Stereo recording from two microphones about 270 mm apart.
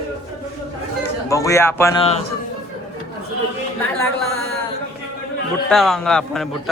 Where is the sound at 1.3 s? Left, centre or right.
Centre.